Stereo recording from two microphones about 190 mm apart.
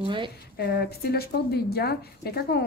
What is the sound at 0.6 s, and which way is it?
A woman's voice, 55° left (ahead or behind).